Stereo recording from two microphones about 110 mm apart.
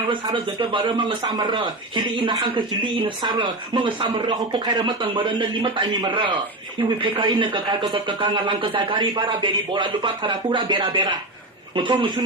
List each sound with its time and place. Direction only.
0.1 s a man's voice: 50° right (ahead or behind)